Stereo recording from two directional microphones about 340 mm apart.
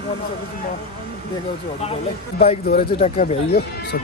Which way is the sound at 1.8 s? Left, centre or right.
Centre.